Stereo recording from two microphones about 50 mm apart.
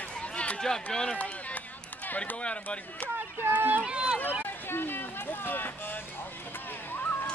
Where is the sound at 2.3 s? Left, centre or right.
Left.